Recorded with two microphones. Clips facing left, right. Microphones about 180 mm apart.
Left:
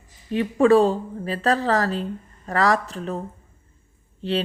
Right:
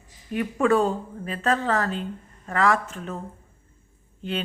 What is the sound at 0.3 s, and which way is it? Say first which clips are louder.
Speech: left 5 dB; 30° left (ahead or behind).